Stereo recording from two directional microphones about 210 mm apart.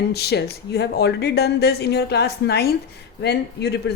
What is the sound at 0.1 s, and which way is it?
Speech, 50° left (ahead or behind).